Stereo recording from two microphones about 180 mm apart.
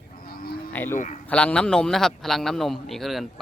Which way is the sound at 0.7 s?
10° left (ahead or behind).